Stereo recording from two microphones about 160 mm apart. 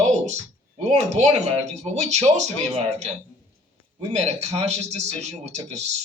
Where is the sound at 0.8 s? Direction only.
45° right (ahead or behind).